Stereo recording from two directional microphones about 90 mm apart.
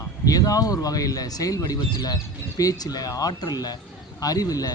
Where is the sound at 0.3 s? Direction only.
45° left (ahead or behind).